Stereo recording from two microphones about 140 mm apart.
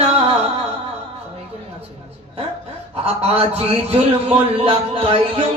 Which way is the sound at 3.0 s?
45° right (ahead or behind).